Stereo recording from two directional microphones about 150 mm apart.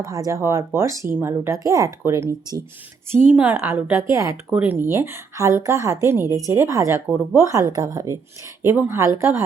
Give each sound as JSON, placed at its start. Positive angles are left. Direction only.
{"t": 0.0, "sound": "speech", "side_deg": -20}